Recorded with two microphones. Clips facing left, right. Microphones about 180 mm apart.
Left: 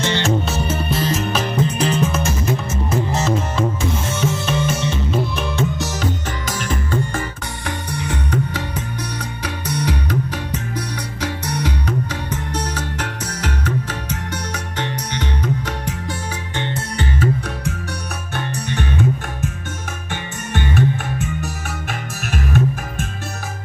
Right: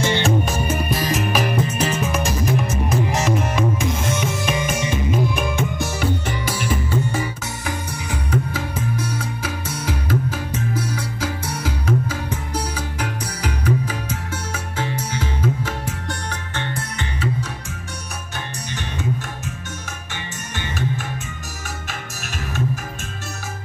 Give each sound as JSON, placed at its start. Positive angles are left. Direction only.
{"t": 0.0, "sound": "music", "side_deg": -10}
{"t": 16.3, "sound": "music", "side_deg": 20}
{"t": 18.3, "sound": "music", "side_deg": 60}
{"t": 20.5, "sound": "music", "side_deg": 60}